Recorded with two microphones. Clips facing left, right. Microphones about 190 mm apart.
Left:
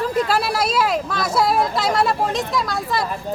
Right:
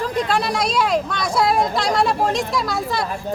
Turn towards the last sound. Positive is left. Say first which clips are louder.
# even
turn(degrees=0)  # may be behind; listen again after turning